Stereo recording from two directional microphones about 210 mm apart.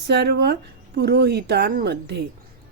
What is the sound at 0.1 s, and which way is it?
Speech, 50° right (ahead or behind).